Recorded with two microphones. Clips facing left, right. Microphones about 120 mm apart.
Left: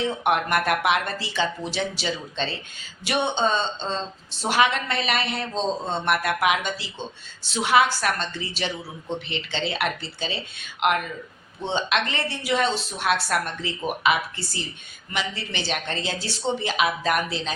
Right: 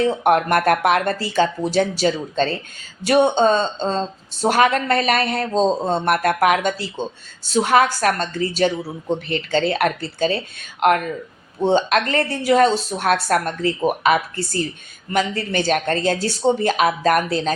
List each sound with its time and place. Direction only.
0.0 s a man's voice: 45° right (ahead or behind)